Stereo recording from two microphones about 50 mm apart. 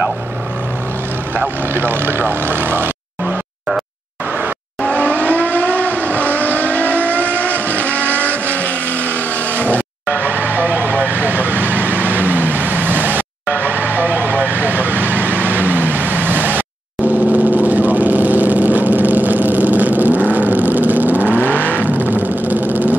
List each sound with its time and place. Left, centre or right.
1.7 s speech: right
4.8 s vehicle: left
10.1 s vehicle: right
21.2 s vehicle: left
22.0 s vehicle: right